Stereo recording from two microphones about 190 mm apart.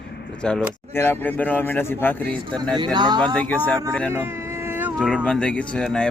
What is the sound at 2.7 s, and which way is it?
Speech, 20° right (ahead or behind).